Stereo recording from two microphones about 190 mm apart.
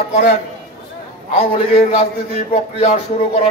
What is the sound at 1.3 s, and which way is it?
A man's voice, 30° left (ahead or behind).